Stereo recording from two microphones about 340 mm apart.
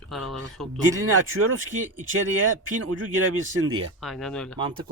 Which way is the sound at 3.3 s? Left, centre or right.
Right.